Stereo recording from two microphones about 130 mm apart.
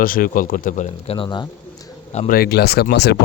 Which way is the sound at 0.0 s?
90° left.